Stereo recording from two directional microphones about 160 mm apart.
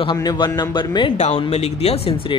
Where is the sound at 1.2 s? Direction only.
40° left (ahead or behind).